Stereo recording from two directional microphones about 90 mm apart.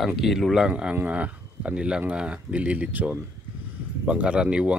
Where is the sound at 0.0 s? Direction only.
Centre (ahead or behind).